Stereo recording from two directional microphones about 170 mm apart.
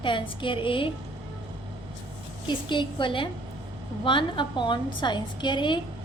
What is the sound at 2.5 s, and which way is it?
A woman's voice, 30° left (ahead or behind).